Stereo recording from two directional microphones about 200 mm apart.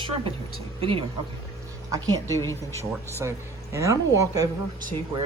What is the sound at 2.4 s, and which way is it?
Speech, 15° left (ahead or behind).